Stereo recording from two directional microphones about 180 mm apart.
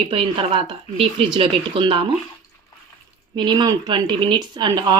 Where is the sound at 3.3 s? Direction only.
25° right (ahead or behind).